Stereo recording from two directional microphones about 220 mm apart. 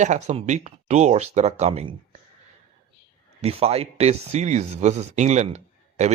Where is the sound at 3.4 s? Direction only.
25° right (ahead or behind).